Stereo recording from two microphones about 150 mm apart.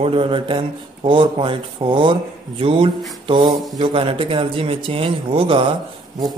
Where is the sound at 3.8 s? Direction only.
40° right (ahead or behind).